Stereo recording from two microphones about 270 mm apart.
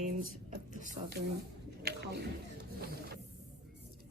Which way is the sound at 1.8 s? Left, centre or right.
Right.